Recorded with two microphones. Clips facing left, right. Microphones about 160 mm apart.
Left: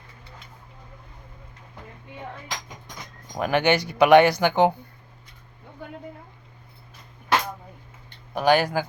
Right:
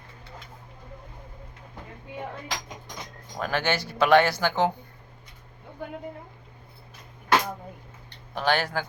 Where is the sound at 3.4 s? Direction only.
15° left (ahead or behind).